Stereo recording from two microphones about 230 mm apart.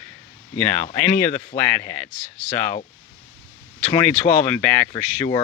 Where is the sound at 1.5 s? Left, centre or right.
Left.